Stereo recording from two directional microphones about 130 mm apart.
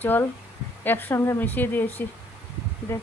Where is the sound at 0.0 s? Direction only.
15° left (ahead or behind).